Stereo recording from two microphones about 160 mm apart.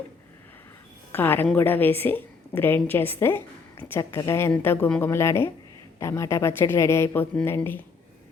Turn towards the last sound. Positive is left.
turn(degrees=15)  # may be behind; listen again after turning